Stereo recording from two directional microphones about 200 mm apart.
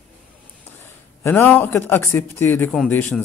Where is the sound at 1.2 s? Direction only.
10° left (ahead or behind).